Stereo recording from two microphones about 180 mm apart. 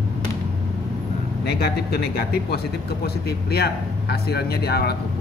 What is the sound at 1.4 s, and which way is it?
Speech, 60° left (ahead or behind).